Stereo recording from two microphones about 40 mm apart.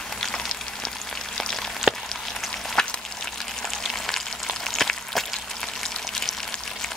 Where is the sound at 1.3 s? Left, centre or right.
Centre.